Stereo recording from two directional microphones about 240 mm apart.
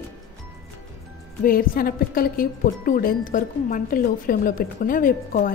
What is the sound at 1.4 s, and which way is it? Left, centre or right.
A woman's voice, left.